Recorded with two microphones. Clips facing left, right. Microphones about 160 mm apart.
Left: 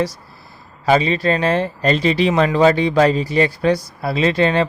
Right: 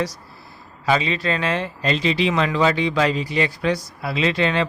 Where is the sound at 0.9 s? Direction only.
40° left (ahead or behind).